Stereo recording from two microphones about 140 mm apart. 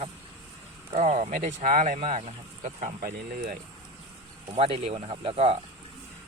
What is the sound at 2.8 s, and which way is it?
Speech, 75° right (ahead or behind).